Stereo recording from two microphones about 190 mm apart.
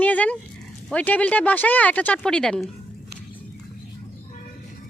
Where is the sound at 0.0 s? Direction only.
5° left (ahead or behind).